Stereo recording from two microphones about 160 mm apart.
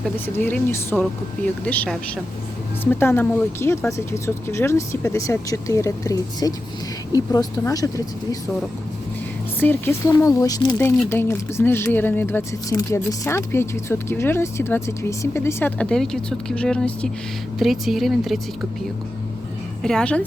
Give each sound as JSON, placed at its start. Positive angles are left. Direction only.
{"t": 0.3, "sound": "speech", "side_deg": 15}
{"t": 9.6, "sound": "speech", "side_deg": 15}
{"t": 11.1, "sound": "speech", "side_deg": 15}
{"t": 19.8, "sound": "speech", "side_deg": 5}